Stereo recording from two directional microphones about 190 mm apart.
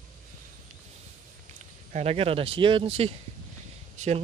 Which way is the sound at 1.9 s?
35° right (ahead or behind).